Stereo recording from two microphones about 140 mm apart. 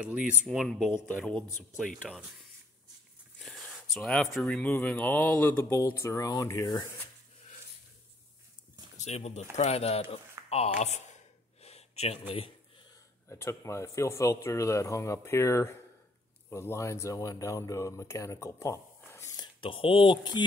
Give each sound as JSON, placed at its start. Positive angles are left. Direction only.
{"t": 0.0, "sound": "speech", "side_deg": -5}
{"t": 1.0, "sound": "mantra", "side_deg": 10}
{"t": 2.0, "sound": "speech", "side_deg": 0}
{"t": 3.3, "sound": "a sound", "side_deg": 5}
{"t": 4.6, "sound": "mantra", "side_deg": 10}
{"t": 6.0, "sound": "speech", "side_deg": 25}
{"t": 8.9, "sound": "speech", "side_deg": 55}
{"t": 11.6, "sound": "a sound", "side_deg": 50}
{"t": 13.3, "sound": "speech", "side_deg": 20}
{"t": 19.4, "sound": "speech", "side_deg": 35}